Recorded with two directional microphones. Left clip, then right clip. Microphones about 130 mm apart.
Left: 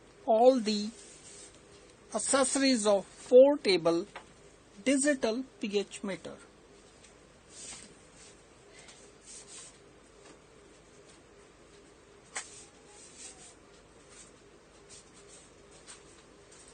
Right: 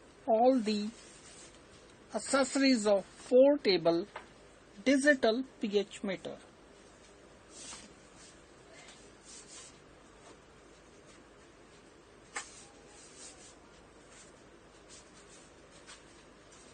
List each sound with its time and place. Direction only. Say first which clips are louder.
0.3 s speech: left 4 dB; 90° left
2.1 s speech: left 2 dB; 75° left (ahead or behind); by 4.0 s 40° left (ahead or behind)
4.9 s a woman's voice: right 2 dB; 15° left (ahead or behind)